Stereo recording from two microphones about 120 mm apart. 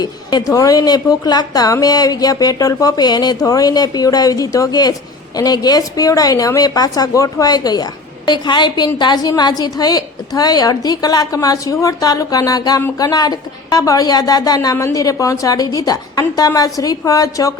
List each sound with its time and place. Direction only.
0.0 s a woman's voice: 35° left (ahead or behind)